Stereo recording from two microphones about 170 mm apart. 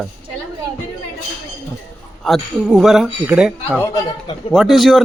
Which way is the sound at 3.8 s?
20° left (ahead or behind).